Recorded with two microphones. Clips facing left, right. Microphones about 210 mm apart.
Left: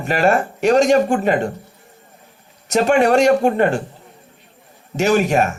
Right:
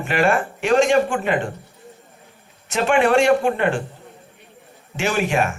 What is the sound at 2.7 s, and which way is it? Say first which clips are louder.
A man's voice: left 3 dB; 40° left (ahead or behind).